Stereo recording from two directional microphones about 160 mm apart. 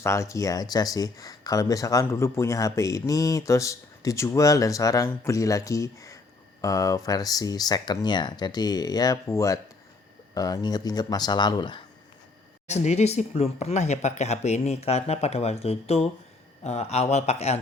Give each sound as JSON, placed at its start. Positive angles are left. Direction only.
{"t": 0.0, "sound": "speech", "side_deg": 20}
{"t": 12.6, "sound": "speech", "side_deg": 45}